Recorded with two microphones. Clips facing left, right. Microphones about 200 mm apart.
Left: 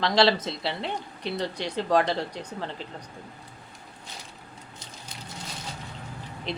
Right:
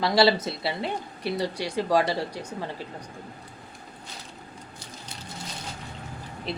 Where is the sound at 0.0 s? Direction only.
10° right (ahead or behind).